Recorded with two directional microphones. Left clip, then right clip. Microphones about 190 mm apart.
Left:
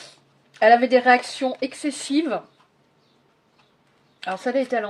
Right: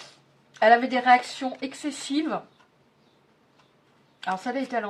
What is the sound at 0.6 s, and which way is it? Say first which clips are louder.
Speech: left 4 dB; 40° left (ahead or behind).